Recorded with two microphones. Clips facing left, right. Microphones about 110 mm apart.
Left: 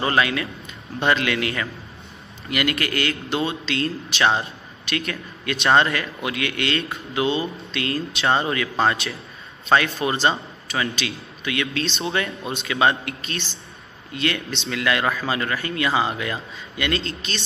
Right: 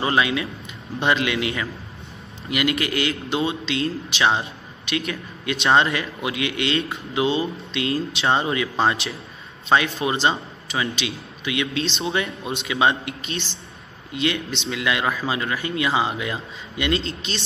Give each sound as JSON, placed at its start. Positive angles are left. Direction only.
{"t": 0.0, "sound": "a man's voice", "side_deg": -15}